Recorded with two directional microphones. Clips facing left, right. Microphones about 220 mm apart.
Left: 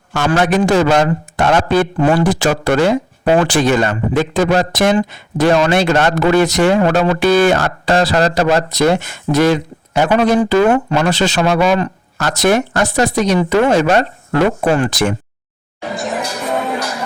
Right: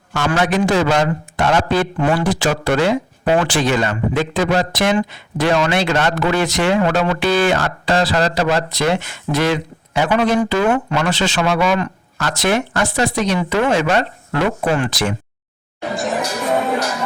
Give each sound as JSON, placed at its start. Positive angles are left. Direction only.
{"t": 0.1, "sound": "speech", "side_deg": 45}
{"t": 16.0, "sound": "music", "side_deg": 0}